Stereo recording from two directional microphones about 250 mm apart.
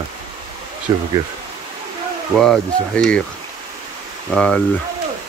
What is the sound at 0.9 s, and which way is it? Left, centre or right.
Speech, centre.